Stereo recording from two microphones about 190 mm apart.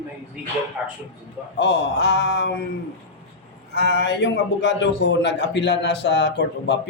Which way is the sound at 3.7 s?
65° left (ahead or behind).